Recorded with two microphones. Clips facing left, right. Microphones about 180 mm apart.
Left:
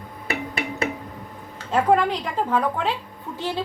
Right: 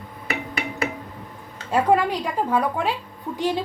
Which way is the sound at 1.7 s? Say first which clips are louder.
Even; 10° right (ahead or behind).